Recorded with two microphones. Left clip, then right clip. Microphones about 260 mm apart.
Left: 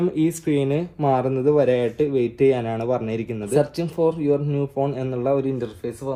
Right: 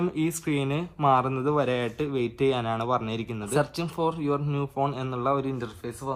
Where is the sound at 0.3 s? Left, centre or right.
Right.